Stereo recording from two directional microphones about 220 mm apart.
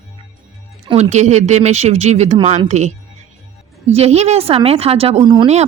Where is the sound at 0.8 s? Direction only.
25° right (ahead or behind).